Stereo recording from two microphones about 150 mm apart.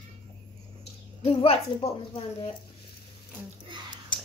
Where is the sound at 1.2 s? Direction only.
40° left (ahead or behind).